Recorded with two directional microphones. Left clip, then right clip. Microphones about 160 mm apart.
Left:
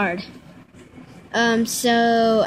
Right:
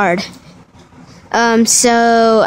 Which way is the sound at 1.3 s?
40° right (ahead or behind).